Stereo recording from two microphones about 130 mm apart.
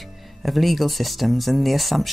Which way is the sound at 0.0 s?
Centre (ahead or behind).